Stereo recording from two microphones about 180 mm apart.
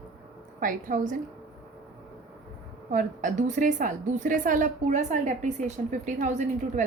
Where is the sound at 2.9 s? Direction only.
45° right (ahead or behind).